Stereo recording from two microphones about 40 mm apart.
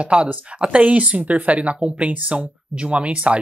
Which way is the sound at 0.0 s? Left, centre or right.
Right.